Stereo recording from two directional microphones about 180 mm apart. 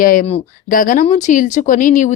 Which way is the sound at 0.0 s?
50° left (ahead or behind).